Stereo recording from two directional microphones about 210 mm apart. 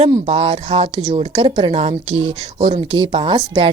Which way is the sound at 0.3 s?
25° right (ahead or behind).